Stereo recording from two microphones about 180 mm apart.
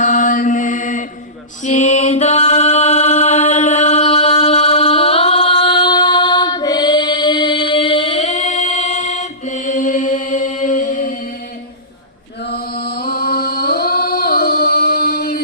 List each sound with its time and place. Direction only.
0.0 s mantra: 45° left (ahead or behind)
1.6 s chant: 40° left (ahead or behind)
12.5 s a sound: 60° left (ahead or behind)